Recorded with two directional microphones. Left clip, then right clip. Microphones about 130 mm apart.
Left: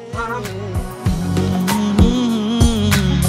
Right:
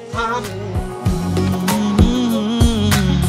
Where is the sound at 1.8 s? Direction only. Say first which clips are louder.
Left 1 dB; centre (ahead or behind).